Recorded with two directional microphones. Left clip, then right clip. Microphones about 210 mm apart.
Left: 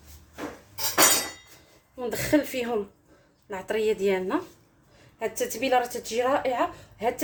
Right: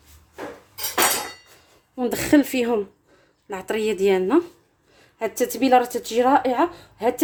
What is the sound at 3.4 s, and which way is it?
Speech, 45° right (ahead or behind).